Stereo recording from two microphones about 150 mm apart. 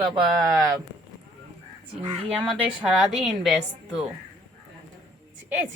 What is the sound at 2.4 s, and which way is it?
A woman's voice, centre (ahead or behind).